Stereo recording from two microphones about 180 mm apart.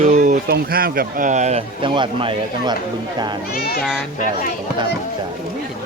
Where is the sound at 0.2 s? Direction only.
60° right (ahead or behind); by 2.7 s 25° right (ahead or behind).